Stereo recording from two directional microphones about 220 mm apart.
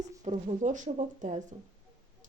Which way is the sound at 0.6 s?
35° right (ahead or behind).